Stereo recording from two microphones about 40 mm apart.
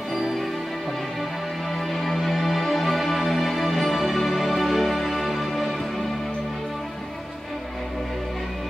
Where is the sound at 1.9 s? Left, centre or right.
Centre.